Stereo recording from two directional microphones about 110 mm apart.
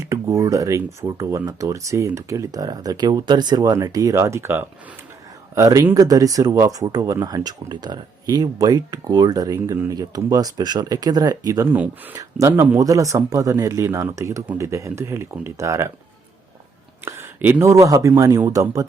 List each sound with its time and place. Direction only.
0.0 s speech: 30° right (ahead or behind)
11.7 s speech: 15° right (ahead or behind)
17.1 s speech: 20° right (ahead or behind)